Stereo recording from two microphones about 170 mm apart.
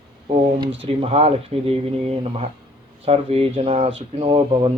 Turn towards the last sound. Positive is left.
turn(degrees=-35)  # may be behind; listen again after turning